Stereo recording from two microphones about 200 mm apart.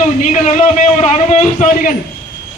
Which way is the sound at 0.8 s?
35° left (ahead or behind).